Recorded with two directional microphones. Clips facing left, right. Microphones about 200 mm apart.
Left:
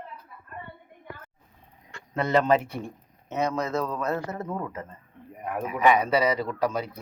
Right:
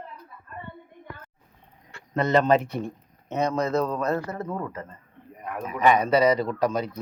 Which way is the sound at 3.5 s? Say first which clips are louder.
Right 4 dB; 35° right (ahead or behind).